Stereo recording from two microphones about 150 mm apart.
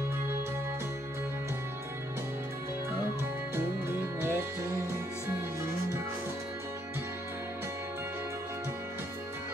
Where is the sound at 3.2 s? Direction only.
15° right (ahead or behind).